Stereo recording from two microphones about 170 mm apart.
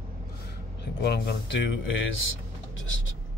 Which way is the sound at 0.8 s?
75° left (ahead or behind).